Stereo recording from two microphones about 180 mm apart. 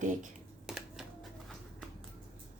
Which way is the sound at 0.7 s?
Centre (ahead or behind).